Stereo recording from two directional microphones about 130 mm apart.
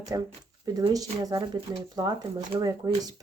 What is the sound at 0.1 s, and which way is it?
Speech, 30° right (ahead or behind).